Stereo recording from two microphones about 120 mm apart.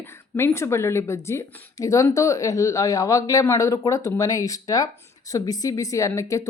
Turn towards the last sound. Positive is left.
turn(degrees=25)  # may be behind; listen again after turning